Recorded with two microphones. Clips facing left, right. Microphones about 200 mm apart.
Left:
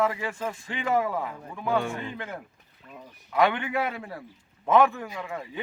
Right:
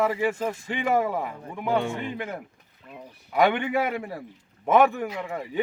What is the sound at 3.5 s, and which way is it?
Speech, 25° right (ahead or behind).